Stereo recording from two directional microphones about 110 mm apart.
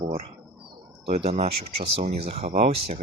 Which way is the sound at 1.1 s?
75° right (ahead or behind).